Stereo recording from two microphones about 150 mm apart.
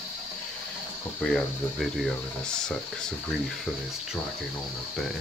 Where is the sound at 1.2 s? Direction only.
Centre (ahead or behind).